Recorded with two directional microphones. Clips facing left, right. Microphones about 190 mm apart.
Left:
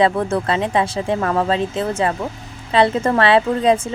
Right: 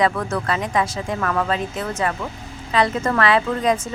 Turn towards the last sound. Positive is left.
turn(degrees=30)  # may be behind; listen again after turning